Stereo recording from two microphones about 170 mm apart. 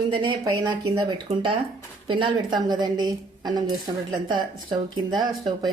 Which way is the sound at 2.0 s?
30° right (ahead or behind).